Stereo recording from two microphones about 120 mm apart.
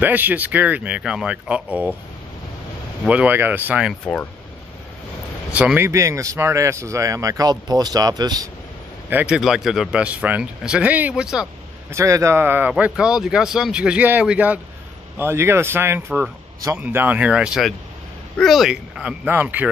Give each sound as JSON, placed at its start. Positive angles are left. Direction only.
{"t": 0.0, "sound": "speech", "side_deg": -15}
{"t": 3.1, "sound": "speech", "side_deg": -15}
{"t": 4.0, "sound": "speech", "side_deg": 10}
{"t": 5.5, "sound": "speech", "side_deg": -10}
{"t": 5.9, "sound": "speech", "side_deg": -25}
{"t": 9.1, "sound": "speech", "side_deg": -5}
{"t": 11.9, "sound": "speech", "side_deg": -25}